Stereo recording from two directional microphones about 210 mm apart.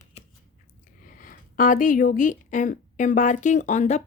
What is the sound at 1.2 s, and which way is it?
Speech, 40° left (ahead or behind).